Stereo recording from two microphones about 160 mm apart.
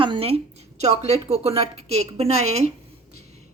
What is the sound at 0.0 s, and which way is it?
A woman's voice, 35° right (ahead or behind).